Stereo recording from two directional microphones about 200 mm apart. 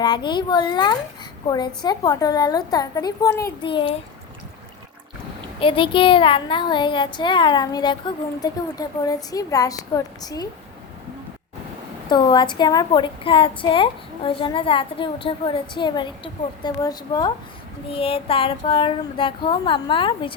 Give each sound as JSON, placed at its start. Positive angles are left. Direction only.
{"t": 0.0, "sound": "a child's voice", "side_deg": 20}
{"t": 5.5, "sound": "a child's voice", "side_deg": 25}
{"t": 12.0, "sound": "a child's voice", "side_deg": 20}